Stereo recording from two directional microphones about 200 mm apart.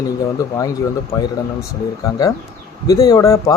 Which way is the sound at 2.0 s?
15° left (ahead or behind).